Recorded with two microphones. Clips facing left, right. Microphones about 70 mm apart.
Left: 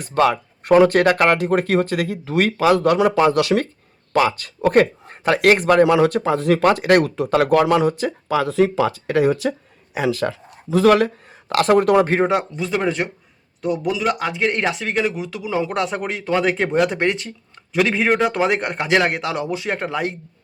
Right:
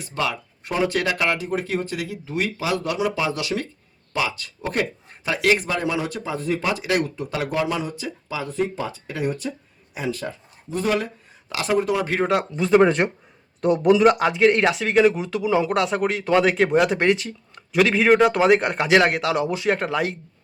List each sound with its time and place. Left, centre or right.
0.0 s speech: left
1.5 s a man's voice: left
12.6 s speech: right
13.6 s speech: right
14.0 s speech: centre
15.2 s speech: right
15.4 s speech: centre
15.9 s speech: centre
16.5 s a man's voice: centre
19.0 s speech: centre
19.3 s speech: centre
19.6 s speech: centre